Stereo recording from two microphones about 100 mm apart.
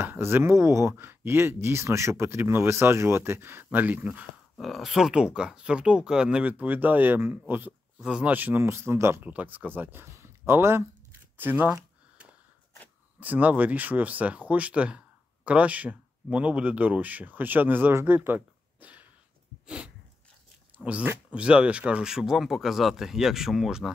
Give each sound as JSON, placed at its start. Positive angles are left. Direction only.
{"t": 0.0, "sound": "speech", "side_deg": -20}
{"t": 4.6, "sound": "speech", "side_deg": 0}
{"t": 9.2, "sound": "speech", "side_deg": -15}
{"t": 19.6, "sound": "a sound", "side_deg": -10}
{"t": 20.7, "sound": "speech", "side_deg": -15}